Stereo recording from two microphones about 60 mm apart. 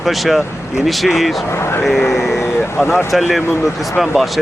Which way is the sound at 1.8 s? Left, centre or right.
Centre.